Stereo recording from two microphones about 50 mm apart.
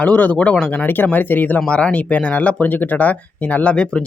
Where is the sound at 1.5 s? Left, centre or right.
Left.